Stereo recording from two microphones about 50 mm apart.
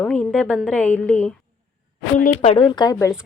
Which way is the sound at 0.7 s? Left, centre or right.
Left.